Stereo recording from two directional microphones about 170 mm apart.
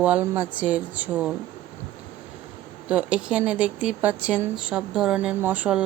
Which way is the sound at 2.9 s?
5° right (ahead or behind).